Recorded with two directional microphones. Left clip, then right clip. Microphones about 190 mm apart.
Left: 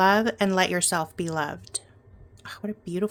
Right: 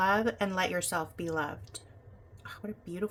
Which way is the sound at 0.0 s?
50° left (ahead or behind).